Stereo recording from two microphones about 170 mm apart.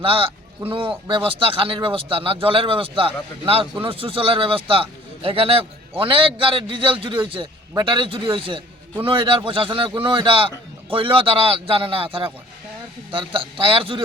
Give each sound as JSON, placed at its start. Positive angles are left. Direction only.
{"t": 0.0, "sound": "a man's voice", "side_deg": -30}